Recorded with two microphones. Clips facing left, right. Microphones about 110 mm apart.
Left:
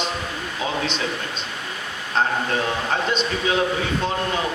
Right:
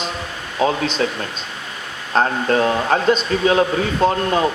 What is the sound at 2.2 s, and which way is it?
A man's voice, 45° right (ahead or behind).